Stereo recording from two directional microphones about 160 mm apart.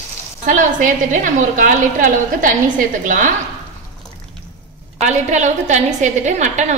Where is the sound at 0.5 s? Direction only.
55° right (ahead or behind).